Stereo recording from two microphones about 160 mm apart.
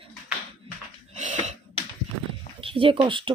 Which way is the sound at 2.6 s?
35° right (ahead or behind).